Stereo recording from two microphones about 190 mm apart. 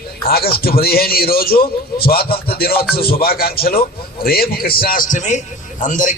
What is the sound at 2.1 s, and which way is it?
A man's voice, 55° left (ahead or behind).